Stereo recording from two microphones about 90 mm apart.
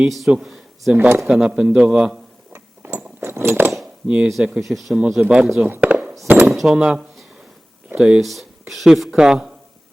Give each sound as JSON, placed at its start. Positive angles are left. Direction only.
{"t": 0.3, "sound": "speech", "side_deg": -5}
{"t": 0.9, "sound": "speech", "side_deg": -25}
{"t": 1.3, "sound": "a man's voice", "side_deg": -10}
{"t": 2.5, "sound": "a sound", "side_deg": -30}
{"t": 3.2, "sound": "keys jangling", "side_deg": -25}
{"t": 3.8, "sound": "cutlery", "side_deg": -10}
{"t": 4.3, "sound": "a man's voice", "side_deg": 0}
{"t": 5.5, "sound": "chop", "side_deg": -20}
{"t": 6.2, "sound": "speech", "side_deg": -20}
{"t": 6.5, "sound": "a sound", "side_deg": 0}
{"t": 6.7, "sound": "speech", "side_deg": -5}